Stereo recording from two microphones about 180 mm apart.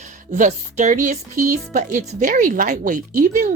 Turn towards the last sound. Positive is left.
turn(degrees=-45)  # may be behind; listen again after turning